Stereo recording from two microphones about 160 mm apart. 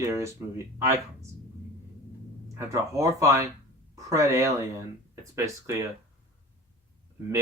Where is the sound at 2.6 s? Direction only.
20° right (ahead or behind).